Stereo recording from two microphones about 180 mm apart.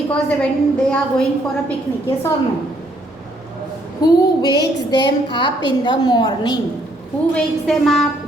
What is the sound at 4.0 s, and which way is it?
A woman's voice, 20° left (ahead or behind).